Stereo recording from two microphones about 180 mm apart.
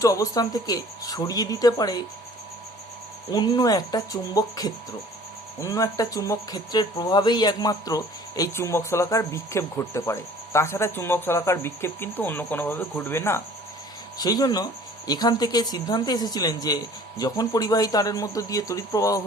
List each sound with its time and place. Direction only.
0.0 s speech: 20° left (ahead or behind)
3.3 s speech: 20° left (ahead or behind)